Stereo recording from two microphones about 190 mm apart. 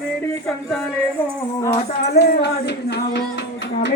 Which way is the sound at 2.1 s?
60° left (ahead or behind).